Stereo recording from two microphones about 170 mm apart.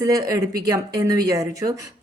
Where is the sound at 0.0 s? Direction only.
20° right (ahead or behind).